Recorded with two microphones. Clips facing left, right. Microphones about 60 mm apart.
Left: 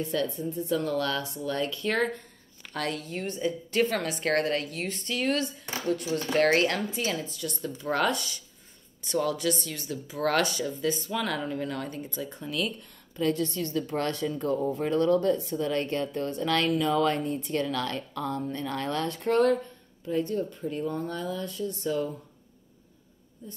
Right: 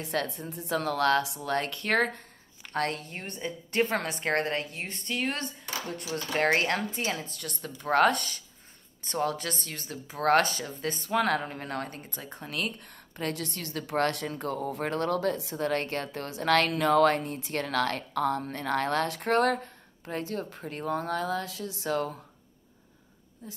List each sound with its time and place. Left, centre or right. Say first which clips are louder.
0.0 s a woman's voice: left 3 dB; right
2.0 s a woman's voice: right 1 dB; right
7.2 s a woman's voice: left 5 dB; right
23.4 s a woman's voice: left 1 dB; right